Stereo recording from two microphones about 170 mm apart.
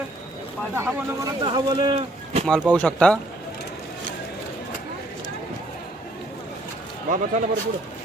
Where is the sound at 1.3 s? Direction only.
25° right (ahead or behind).